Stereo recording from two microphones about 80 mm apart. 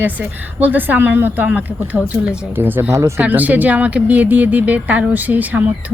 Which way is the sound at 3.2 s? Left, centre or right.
Centre.